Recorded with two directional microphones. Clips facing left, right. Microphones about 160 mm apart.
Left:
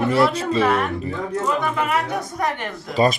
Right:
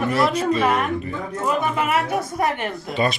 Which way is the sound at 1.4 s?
20° right (ahead or behind).